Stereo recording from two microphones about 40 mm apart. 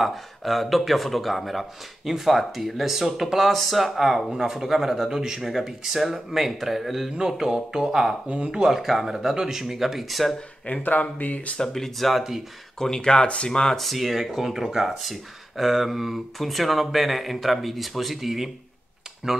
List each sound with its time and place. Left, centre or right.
0.0 s speech: centre
7.2 s speech: centre
10.8 s speech: left
11.5 s speech: centre
12.7 s speech: centre
13.7 s speech: centre